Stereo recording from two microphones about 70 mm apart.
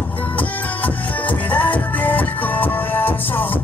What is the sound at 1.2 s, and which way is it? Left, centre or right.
Music, left.